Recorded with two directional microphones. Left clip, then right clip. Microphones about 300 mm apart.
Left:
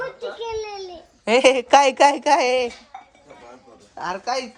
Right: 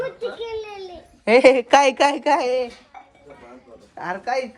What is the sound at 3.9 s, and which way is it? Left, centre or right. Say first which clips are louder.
Speech: even; centre.